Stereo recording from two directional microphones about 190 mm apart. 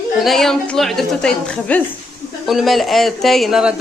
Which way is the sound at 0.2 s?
Centre (ahead or behind).